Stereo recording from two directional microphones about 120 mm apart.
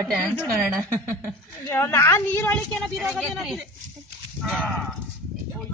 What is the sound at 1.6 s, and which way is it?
A woman's voice, 20° left (ahead or behind).